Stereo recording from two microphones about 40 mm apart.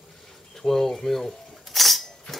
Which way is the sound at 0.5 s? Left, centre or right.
Centre.